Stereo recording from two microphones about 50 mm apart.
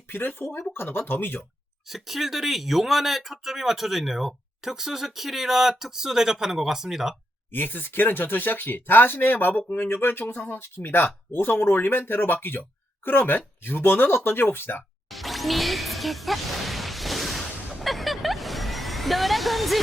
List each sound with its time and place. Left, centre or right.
0.1 s speech: left
1.9 s speech: centre
7.5 s speech: left
15.1 s music: centre